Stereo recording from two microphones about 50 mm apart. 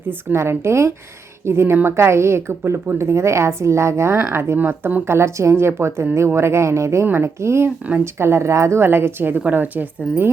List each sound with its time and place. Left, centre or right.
0.3 s a woman's voice: right
2.0 s a woman's voice: right
4.2 s a woman's voice: right
4.5 s a woman's voice: right
5.0 s a woman's voice: right
7.1 s a woman's voice: right
8.8 s a woman's voice: right